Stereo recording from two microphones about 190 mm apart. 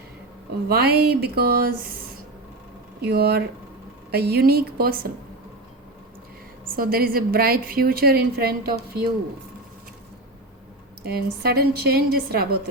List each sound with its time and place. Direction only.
0.7 s a woman's voice: 55° right (ahead or behind)
3.0 s a woman's voice: 55° right (ahead or behind)
6.7 s a woman's voice: 50° right (ahead or behind)
11.0 s a woman's voice: 55° right (ahead or behind)